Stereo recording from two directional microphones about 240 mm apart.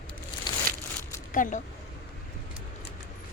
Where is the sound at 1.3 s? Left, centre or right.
Left.